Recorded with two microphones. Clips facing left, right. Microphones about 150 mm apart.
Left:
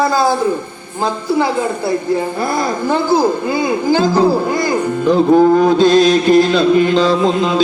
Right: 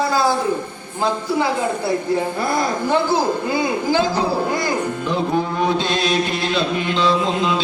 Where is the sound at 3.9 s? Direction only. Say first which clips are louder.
Left 8 dB; 40° left (ahead or behind).